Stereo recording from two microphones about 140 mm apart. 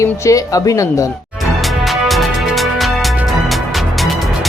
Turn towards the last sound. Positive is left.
turn(degrees=0)  # may be behind; listen again after turning